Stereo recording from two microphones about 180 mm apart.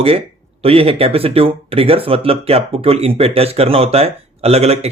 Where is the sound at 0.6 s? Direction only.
30° right (ahead or behind).